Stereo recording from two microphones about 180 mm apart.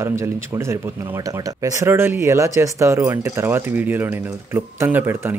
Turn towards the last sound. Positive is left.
turn(degrees=-15)  # may be behind; listen again after turning